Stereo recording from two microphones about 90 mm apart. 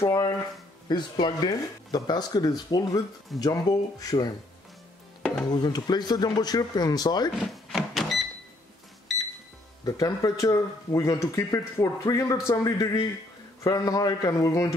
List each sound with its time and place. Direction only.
0.0 s speech: 40° left (ahead or behind)
0.8 s speech: 55° left (ahead or behind)
5.5 s speech: 50° left (ahead or behind)
7.3 s a sound: centre (ahead or behind)
9.8 s speech: 40° left (ahead or behind)